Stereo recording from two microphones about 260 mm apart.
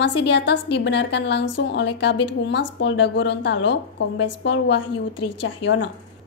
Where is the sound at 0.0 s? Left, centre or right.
Left.